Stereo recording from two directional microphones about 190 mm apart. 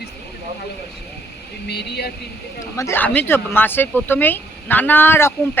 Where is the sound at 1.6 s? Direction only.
60° left (ahead or behind).